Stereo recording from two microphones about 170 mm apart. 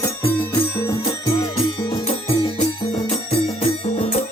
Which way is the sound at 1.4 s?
25° left (ahead or behind).